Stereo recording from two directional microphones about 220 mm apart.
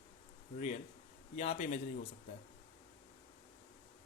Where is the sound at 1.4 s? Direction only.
30° left (ahead or behind).